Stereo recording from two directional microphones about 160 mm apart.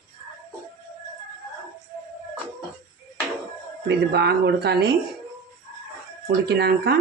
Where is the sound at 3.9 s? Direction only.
90° right.